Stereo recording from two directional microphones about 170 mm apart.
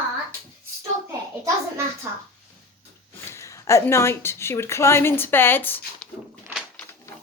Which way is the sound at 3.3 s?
15° left (ahead or behind).